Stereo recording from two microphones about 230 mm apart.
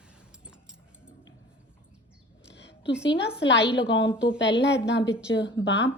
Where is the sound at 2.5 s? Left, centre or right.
Left.